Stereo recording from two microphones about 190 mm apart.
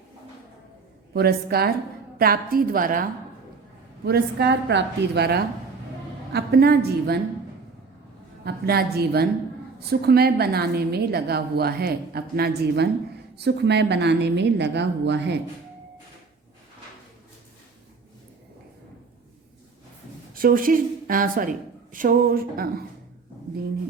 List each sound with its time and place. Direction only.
1.1 s a woman's voice: 55° right (ahead or behind)
4.0 s a woman's voice: 60° right (ahead or behind)
8.4 s a woman's voice: 55° right (ahead or behind)
20.3 s a woman's voice: 45° right (ahead or behind)